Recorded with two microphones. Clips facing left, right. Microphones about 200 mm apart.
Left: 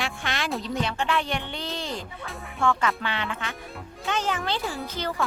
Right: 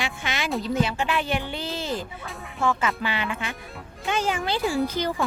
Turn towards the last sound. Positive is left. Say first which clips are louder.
# right 7 dB
turn(degrees=-10)  # may be behind; listen again after turning